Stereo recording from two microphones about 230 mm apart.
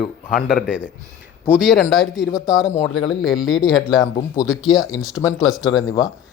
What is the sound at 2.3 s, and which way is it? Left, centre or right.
Speech, centre.